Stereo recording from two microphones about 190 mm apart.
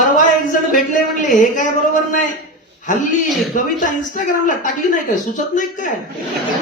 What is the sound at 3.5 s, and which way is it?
A man's voice, 40° left (ahead or behind).